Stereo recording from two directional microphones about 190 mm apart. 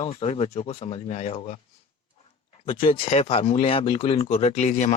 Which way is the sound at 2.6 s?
30° left (ahead or behind).